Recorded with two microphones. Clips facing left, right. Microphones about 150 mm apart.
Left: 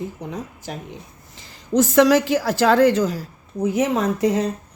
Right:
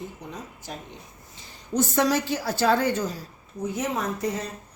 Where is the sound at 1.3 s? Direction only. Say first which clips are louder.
Left 7 dB; 90° left.